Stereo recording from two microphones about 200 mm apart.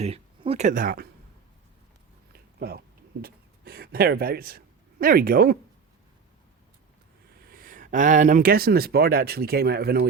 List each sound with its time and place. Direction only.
0.0 s speech: 30° right (ahead or behind)
2.3 s a sound: 50° right (ahead or behind)
7.4 s speech: 45° right (ahead or behind)